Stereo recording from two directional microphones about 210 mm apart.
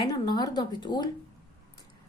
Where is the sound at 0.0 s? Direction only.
20° left (ahead or behind).